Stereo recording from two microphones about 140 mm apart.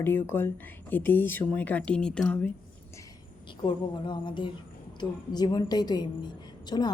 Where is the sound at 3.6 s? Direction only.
35° left (ahead or behind).